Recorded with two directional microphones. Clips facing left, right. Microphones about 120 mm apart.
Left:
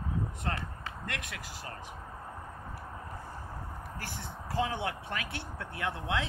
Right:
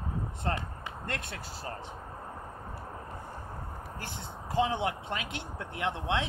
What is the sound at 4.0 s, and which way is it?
Speech, 20° right (ahead or behind).